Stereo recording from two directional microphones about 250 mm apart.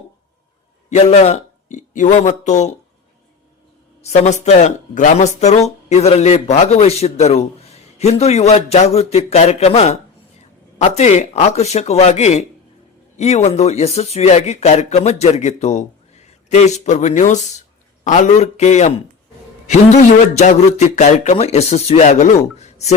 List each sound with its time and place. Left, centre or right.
0.9 s speech: left
4.0 s speech: left